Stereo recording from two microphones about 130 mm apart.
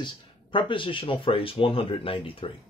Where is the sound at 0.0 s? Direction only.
40° left (ahead or behind).